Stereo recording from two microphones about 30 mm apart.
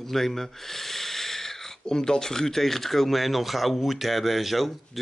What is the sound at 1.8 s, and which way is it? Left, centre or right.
A man's voice, left.